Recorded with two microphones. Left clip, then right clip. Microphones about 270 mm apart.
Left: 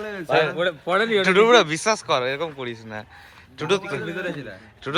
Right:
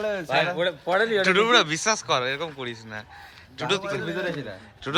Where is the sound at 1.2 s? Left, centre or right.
Centre.